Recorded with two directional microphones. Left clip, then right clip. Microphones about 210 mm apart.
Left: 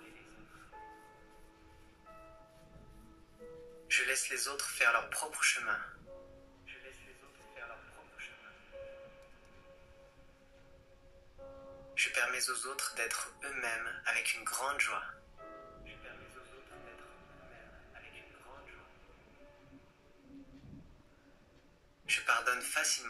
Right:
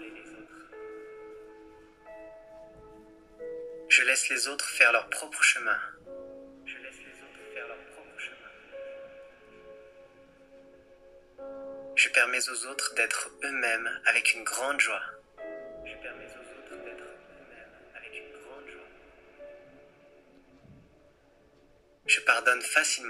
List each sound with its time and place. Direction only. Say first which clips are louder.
3.8 s speech: right 10 dB; 40° right (ahead or behind)
6.6 s music: right 7 dB; 45° right (ahead or behind)
11.9 s a man's voice: right 9 dB; 40° right (ahead or behind)
15.4 s music: right 11 dB; 40° right (ahead or behind)
17.9 s a sound: right 11 dB; 40° right (ahead or behind)
22.0 s a sound: right 8 dB; 40° right (ahead or behind)